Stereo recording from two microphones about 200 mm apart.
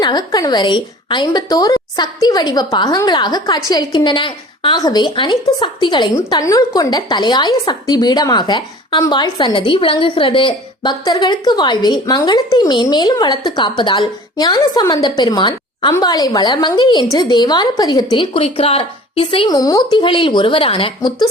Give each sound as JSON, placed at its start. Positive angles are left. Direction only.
{"t": 0.0, "sound": "a woman's voice", "side_deg": 20}